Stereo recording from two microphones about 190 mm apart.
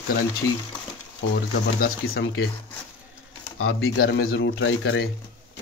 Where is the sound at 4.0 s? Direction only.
65° left (ahead or behind); by 5.0 s 85° left.